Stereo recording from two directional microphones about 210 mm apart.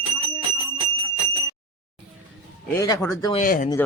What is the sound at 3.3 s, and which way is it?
Speech, 40° left (ahead or behind).